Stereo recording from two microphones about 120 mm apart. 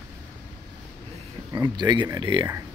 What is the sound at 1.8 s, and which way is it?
Speech, 40° right (ahead or behind).